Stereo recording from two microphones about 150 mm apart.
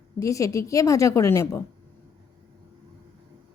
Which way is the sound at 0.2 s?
20° left (ahead or behind).